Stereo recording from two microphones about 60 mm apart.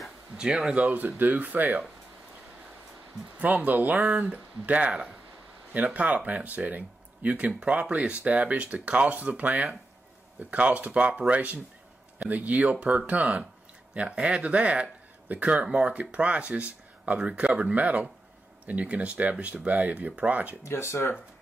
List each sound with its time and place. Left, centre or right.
0.4 s speech: centre
0.7 s speech: right
3.3 s speech: right
20.6 s speech: left